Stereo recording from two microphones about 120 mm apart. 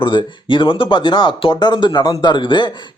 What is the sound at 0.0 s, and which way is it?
Speech, 45° left (ahead or behind).